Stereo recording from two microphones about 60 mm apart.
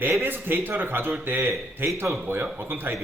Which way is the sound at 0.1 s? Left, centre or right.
Right.